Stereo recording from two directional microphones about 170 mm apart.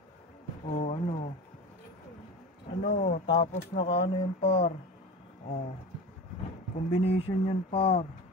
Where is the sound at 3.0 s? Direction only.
50° left (ahead or behind); by 4.7 s 35° left (ahead or behind).